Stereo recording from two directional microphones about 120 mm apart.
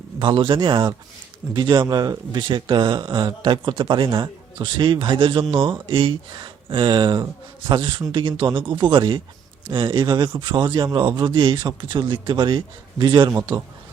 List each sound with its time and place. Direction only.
0.2 s a man's voice: 40° right (ahead or behind)